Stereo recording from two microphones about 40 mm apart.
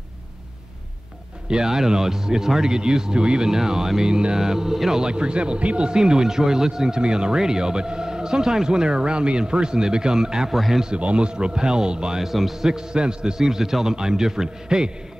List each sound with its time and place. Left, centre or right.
1.5 s speech: centre
5.0 s speech: right
10.5 s a man's voice: centre
11.0 s speech: right
12.2 s a man's voice: centre
12.6 s speech: centre
13.4 s speech: centre